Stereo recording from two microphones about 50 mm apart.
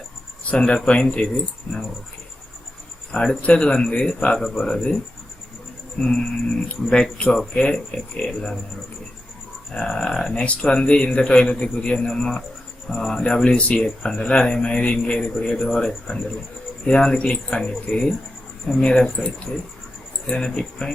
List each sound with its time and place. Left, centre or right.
0.5 s speech: centre
3.1 s a man's voice: centre
6.0 s a man's voice: centre
9.7 s a man's voice: centre